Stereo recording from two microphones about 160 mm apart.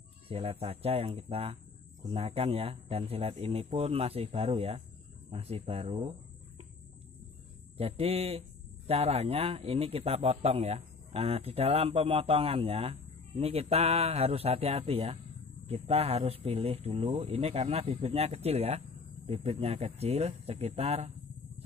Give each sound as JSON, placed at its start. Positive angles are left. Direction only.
{"t": 0.3, "sound": "a man's voice", "side_deg": -35}
{"t": 7.7, "sound": "a man's voice", "side_deg": -40}